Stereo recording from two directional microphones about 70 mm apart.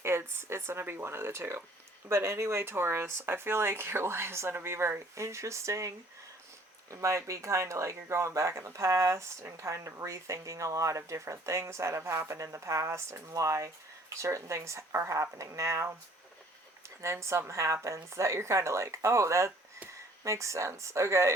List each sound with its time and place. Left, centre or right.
0.0 s speech: right
6.9 s speech: right
17.0 s speech: right